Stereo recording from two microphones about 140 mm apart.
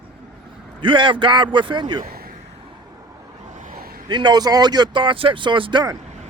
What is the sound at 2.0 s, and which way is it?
Vehicle, 90° right.